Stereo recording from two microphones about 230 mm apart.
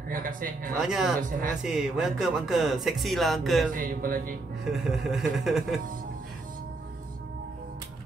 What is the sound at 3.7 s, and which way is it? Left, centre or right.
Speech, right.